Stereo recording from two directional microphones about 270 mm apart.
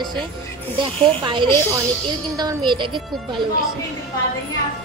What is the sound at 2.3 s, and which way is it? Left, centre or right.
A woman's voice, centre.